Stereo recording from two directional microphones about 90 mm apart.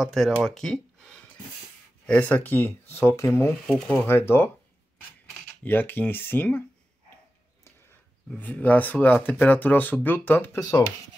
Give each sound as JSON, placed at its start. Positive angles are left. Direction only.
{"t": 0.0, "sound": "speech", "side_deg": 0}
{"t": 2.0, "sound": "speech", "side_deg": 15}
{"t": 3.6, "sound": "speech", "side_deg": 10}
{"t": 3.9, "sound": "speech", "side_deg": 25}
{"t": 5.6, "sound": "speech", "side_deg": 20}
{"t": 8.4, "sound": "speech", "side_deg": 20}